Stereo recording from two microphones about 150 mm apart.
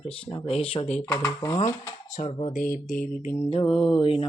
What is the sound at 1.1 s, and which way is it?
Speech, 15° left (ahead or behind).